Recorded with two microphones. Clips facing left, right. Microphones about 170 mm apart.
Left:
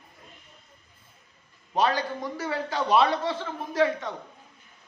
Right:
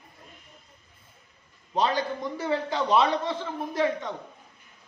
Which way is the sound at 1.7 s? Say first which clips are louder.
Left 1 dB; 20° right (ahead or behind).